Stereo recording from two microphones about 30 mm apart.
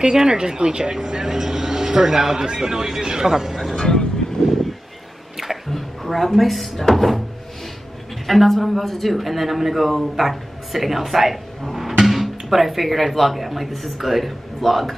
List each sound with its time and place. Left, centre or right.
0.0 s a woman's voice: right
3.7 s speech: left
4.4 s a sound: left
5.7 s speech: centre
8.3 s speech: centre